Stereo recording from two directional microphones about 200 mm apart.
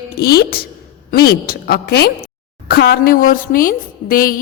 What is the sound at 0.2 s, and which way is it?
A woman's voice, 50° left (ahead or behind).